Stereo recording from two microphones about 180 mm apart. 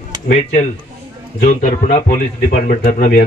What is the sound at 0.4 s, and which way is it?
A man's voice, 40° left (ahead or behind).